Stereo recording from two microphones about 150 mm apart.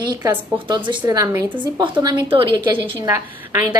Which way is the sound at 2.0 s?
35° right (ahead or behind).